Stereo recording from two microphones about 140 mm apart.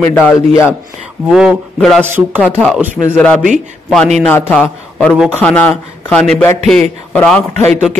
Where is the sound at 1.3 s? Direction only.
5° right (ahead or behind).